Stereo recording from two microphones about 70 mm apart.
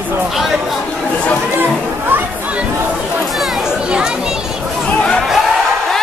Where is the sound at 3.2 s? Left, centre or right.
Centre.